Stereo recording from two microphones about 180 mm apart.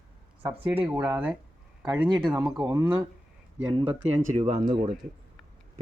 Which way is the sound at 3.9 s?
35° right (ahead or behind).